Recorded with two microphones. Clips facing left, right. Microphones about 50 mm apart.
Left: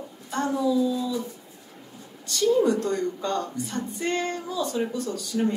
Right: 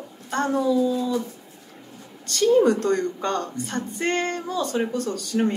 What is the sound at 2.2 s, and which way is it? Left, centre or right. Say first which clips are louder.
A woman's voice: right 3 dB; right.